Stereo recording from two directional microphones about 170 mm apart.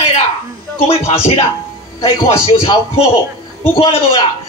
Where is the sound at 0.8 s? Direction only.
35° left (ahead or behind).